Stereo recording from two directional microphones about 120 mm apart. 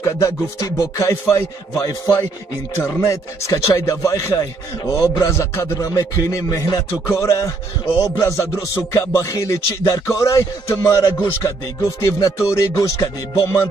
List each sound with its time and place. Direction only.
0.0 s a man's voice: 30° left (ahead or behind)